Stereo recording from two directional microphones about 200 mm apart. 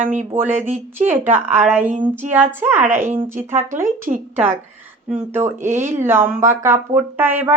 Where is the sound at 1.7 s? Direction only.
10° right (ahead or behind).